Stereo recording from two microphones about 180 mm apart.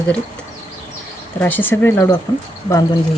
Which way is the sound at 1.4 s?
10° left (ahead or behind).